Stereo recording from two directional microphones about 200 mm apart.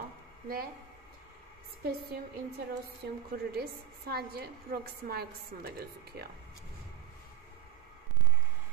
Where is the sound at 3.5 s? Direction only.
50° right (ahead or behind).